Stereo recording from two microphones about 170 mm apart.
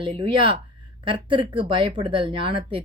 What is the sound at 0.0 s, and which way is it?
Speech, 30° right (ahead or behind).